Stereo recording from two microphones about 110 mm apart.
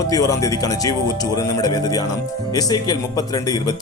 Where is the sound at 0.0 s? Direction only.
30° left (ahead or behind).